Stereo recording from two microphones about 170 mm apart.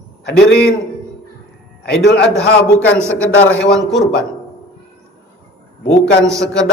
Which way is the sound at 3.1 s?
10° left (ahead or behind).